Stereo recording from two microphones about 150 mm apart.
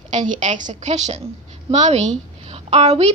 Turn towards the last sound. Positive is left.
turn(degrees=-45)  # may be behind; listen again after turning